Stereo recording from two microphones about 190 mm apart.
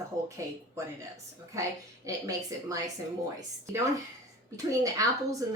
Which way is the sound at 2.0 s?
15° right (ahead or behind).